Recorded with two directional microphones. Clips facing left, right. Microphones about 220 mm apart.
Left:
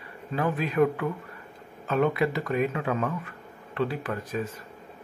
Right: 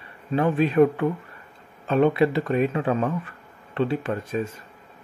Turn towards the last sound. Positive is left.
turn(degrees=-25)  # may be behind; listen again after turning